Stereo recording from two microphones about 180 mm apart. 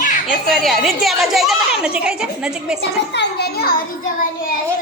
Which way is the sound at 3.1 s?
65° left (ahead or behind).